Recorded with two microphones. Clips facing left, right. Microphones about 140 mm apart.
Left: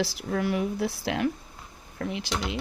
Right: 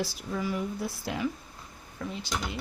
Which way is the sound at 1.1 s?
70° left (ahead or behind).